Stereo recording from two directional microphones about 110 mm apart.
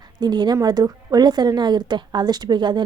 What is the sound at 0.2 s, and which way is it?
A woman's voice, 40° right (ahead or behind).